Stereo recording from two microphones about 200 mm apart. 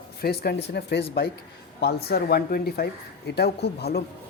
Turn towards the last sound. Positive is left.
turn(degrees=55)  # may be behind; listen again after turning